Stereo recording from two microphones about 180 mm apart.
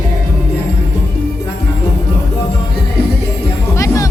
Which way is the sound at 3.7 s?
15° left (ahead or behind).